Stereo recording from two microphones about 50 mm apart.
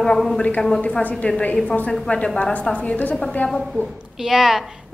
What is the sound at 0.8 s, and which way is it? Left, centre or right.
A woman's voice, left.